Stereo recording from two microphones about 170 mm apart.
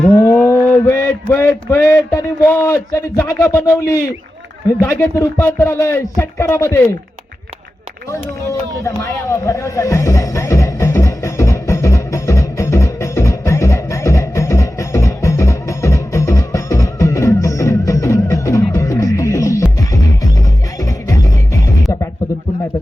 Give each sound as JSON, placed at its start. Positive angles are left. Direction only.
{"t": 0.2, "sound": "a sound", "side_deg": 15}
{"t": 4.8, "sound": "speech", "side_deg": 15}
{"t": 8.8, "sound": "music", "side_deg": 15}
{"t": 21.1, "sound": "music", "side_deg": 20}